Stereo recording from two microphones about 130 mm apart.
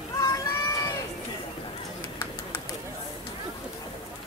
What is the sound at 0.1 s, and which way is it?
Run, 25° left (ahead or behind).